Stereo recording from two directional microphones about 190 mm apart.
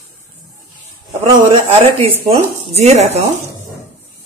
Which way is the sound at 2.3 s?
35° right (ahead or behind).